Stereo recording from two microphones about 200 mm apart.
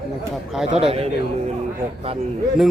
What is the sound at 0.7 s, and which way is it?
Speech, 30° right (ahead or behind).